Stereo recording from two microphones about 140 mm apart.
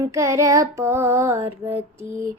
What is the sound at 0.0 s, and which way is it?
Mantra, 20° right (ahead or behind).